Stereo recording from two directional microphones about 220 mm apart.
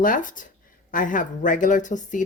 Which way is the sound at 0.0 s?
35° left (ahead or behind).